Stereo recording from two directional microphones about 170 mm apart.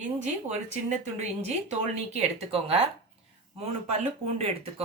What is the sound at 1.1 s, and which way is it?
Speech, 40° right (ahead or behind).